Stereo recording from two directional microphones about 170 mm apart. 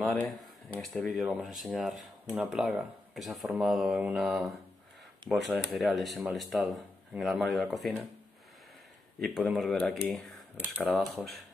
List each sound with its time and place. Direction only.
0.7 s speech: centre (ahead or behind)
9.2 s speech: centre (ahead or behind)